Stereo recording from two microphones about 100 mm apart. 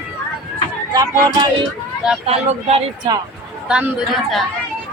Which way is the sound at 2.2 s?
90° right.